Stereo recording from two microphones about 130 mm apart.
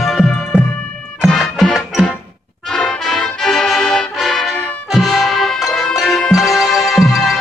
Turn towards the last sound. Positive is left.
turn(degrees=0)  # may be behind; listen again after turning